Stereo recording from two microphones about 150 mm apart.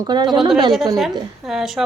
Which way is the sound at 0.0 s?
30° right (ahead or behind).